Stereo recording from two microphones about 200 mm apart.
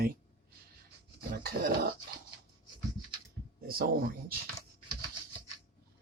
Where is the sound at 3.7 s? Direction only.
50° right (ahead or behind).